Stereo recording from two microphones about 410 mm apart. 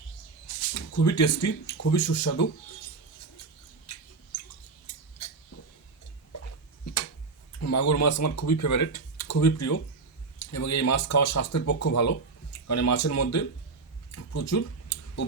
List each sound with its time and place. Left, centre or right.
0.7 s speech: left
7.6 s speech: left
14.3 s clicking: left